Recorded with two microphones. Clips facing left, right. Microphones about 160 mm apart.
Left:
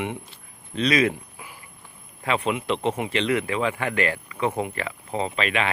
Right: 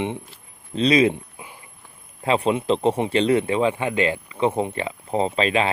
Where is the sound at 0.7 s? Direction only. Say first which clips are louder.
Right 4 dB; 30° right (ahead or behind).